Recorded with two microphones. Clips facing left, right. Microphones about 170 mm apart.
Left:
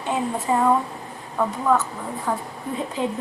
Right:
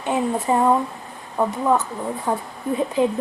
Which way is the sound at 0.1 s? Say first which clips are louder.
Right 3 dB; 20° right (ahead or behind).